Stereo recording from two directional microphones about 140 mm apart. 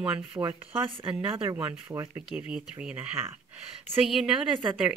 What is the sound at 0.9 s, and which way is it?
Speech, 40° right (ahead or behind).